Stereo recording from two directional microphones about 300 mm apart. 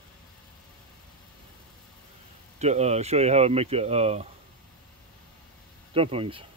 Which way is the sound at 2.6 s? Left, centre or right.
Right.